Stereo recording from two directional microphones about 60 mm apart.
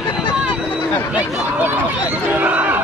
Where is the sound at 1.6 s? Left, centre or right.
Right.